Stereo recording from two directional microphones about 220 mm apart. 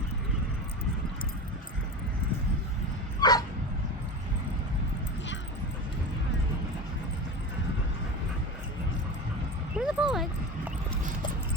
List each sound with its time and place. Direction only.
3.2 s dog: 20° left (ahead or behind)
9.7 s dog: 5° right (ahead or behind)